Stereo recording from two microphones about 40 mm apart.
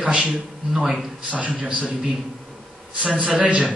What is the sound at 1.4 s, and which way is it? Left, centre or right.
Speech, right.